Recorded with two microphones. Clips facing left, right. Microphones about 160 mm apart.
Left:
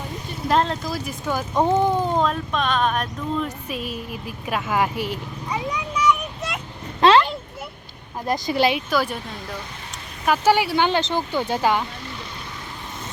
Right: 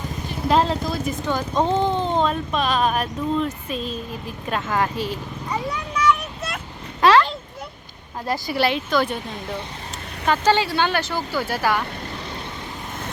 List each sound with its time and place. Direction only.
0.4 s speech: centre (ahead or behind)
3.7 s vehicle: 10° left (ahead or behind)
7.0 s a sound: 25° left (ahead or behind)
8.2 s speech: 15° left (ahead or behind)
10.2 s speech: 10° left (ahead or behind)